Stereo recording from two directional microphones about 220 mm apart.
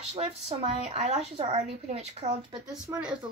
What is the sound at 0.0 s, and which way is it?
Speech, 30° right (ahead or behind).